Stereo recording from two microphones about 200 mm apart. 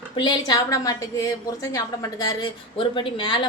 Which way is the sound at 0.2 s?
20° left (ahead or behind).